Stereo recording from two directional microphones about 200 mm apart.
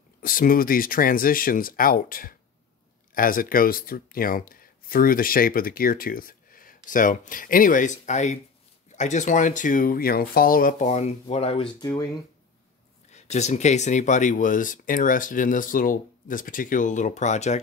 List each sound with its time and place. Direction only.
0.2 s speech: 45° left (ahead or behind); by 12.1 s 20° left (ahead or behind)
13.1 s speech: 35° left (ahead or behind)